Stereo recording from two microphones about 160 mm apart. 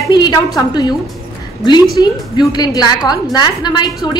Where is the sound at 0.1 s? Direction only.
25° left (ahead or behind).